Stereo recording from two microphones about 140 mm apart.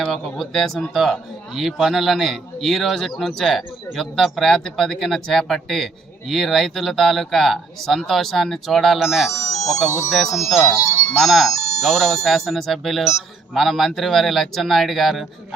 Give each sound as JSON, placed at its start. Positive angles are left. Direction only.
{"t": 0.0, "sound": "speech", "side_deg": 0}
{"t": 9.3, "sound": "music", "side_deg": 20}
{"t": 10.1, "sound": "speech", "side_deg": 0}
{"t": 10.8, "sound": "speech", "side_deg": 20}
{"t": 11.1, "sound": "speech", "side_deg": 0}